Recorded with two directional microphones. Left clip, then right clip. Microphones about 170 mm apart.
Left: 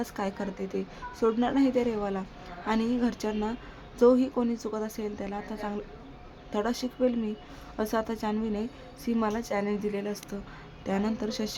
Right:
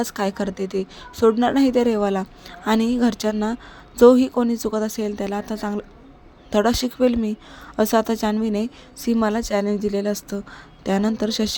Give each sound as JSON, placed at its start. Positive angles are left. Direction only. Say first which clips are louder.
{"t": 0.0, "sound": "a woman's voice", "louder": "right 9 dB", "side_deg": -40}